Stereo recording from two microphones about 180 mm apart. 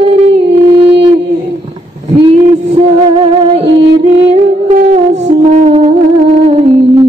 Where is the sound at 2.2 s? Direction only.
35° right (ahead or behind).